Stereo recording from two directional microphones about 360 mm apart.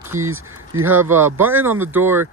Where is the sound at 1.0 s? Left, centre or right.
Centre.